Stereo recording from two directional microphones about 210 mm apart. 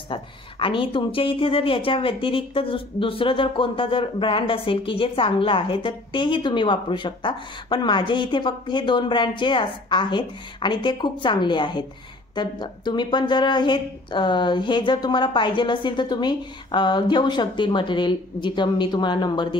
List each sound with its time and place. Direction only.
0.1 s speech: 25° left (ahead or behind)